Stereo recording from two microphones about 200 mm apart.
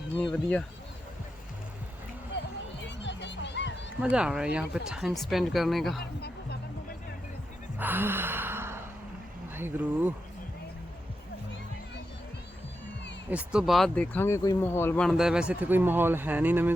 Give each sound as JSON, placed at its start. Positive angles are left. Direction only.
{"t": 0.2, "sound": "speech", "side_deg": 5}
{"t": 3.0, "sound": "music", "side_deg": 60}
{"t": 4.0, "sound": "speech", "side_deg": -5}
{"t": 6.0, "sound": "music", "side_deg": 55}
{"t": 7.8, "sound": "gasp", "side_deg": -10}
{"t": 9.6, "sound": "speech", "side_deg": -10}
{"t": 13.3, "sound": "speech", "side_deg": -5}